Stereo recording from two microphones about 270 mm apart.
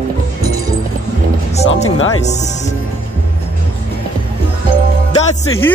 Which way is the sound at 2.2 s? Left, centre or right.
Left.